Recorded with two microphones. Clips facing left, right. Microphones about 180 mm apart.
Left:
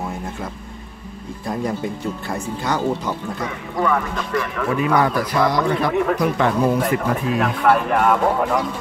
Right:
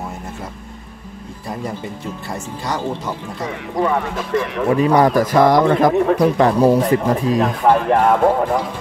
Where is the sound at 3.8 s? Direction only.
25° right (ahead or behind); by 6.0 s 45° right (ahead or behind).